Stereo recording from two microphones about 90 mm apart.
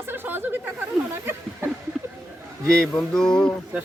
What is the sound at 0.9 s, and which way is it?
Speech, centre (ahead or behind).